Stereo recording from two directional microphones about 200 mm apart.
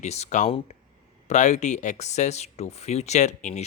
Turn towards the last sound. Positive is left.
turn(degrees=35)  # may be behind; listen again after turning